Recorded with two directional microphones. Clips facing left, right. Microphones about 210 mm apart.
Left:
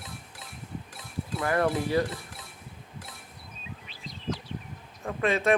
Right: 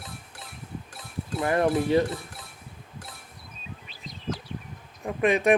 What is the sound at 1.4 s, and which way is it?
Speech, 20° right (ahead or behind).